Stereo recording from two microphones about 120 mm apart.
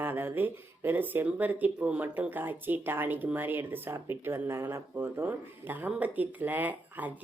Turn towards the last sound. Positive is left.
turn(degrees=-15)  # may be behind; listen again after turning